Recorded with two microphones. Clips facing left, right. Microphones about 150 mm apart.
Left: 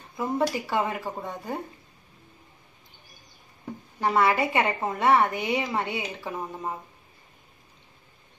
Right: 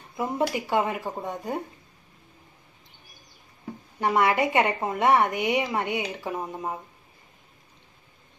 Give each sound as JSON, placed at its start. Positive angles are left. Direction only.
{"t": 0.2, "sound": "a woman's voice", "side_deg": -15}
{"t": 4.0, "sound": "a woman's voice", "side_deg": -15}